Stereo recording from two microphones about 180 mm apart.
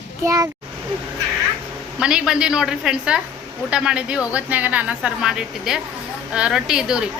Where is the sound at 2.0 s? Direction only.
5° right (ahead or behind).